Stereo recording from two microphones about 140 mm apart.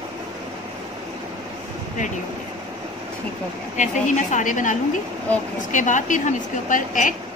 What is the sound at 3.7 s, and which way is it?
A woman's voice, 60° left (ahead or behind).